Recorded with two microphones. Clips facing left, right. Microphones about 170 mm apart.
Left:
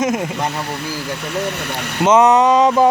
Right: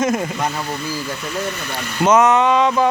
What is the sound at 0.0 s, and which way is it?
Speech, 15° left (ahead or behind).